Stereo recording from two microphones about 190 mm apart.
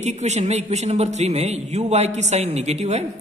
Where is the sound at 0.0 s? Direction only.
35° right (ahead or behind).